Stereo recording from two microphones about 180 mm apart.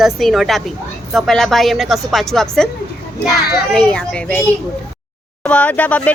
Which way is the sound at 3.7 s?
5° left (ahead or behind).